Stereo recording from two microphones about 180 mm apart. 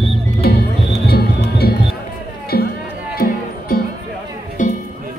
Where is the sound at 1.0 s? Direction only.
60° left (ahead or behind).